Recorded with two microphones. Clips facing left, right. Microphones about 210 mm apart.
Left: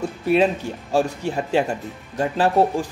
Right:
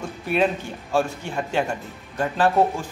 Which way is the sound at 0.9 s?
35° left (ahead or behind).